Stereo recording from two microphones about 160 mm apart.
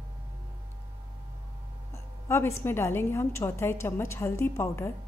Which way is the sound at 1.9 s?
15° left (ahead or behind).